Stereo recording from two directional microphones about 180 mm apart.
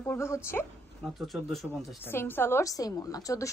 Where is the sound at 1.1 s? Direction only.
Centre (ahead or behind).